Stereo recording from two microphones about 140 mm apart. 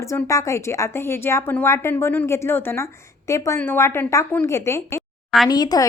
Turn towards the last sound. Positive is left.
turn(degrees=30)  # may be behind; listen again after turning